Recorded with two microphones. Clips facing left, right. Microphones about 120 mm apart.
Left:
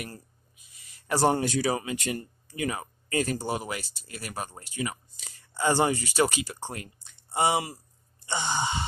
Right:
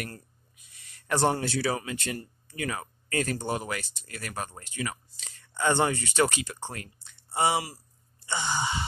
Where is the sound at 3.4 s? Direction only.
10° left (ahead or behind).